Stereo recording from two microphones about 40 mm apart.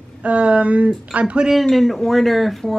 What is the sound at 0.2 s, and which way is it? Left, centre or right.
Speech, right.